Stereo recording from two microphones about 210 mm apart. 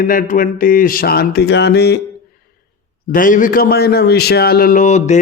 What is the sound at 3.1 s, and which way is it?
A man's voice, 40° left (ahead or behind).